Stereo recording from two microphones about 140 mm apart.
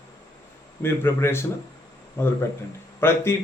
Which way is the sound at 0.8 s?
15° left (ahead or behind).